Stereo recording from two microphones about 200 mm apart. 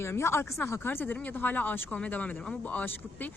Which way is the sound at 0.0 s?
15° left (ahead or behind).